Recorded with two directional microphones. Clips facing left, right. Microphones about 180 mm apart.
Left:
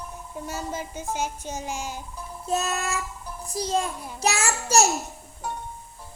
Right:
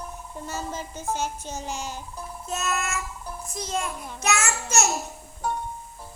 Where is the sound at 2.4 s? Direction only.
35° left (ahead or behind).